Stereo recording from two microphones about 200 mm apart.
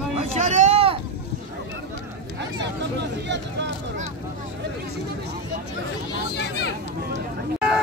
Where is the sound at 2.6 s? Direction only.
60° right (ahead or behind).